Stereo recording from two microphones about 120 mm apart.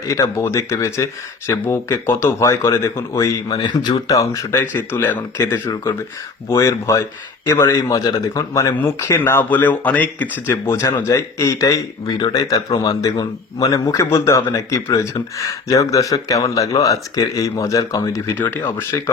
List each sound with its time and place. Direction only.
0.1 s speech: 25° left (ahead or behind)
3.6 s speech: 40° left (ahead or behind)
4.1 s speech: 25° left (ahead or behind)
18.3 s speech: 15° left (ahead or behind)